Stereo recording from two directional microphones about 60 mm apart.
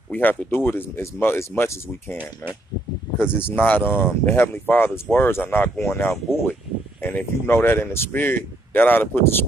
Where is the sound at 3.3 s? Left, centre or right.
Left.